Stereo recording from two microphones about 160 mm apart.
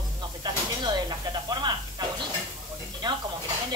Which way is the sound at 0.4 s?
25° right (ahead or behind).